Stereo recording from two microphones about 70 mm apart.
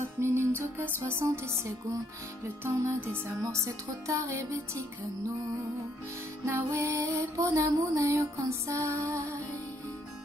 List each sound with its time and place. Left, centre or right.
0.0 s music: right
6.4 s music: right